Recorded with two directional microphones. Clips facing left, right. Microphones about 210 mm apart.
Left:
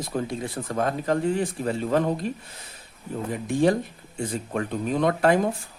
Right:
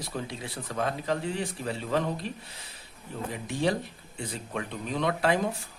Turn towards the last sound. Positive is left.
turn(degrees=50)  # may be behind; listen again after turning